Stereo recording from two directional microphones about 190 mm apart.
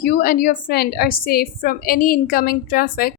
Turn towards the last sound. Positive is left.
turn(degrees=50)  # may be behind; listen again after turning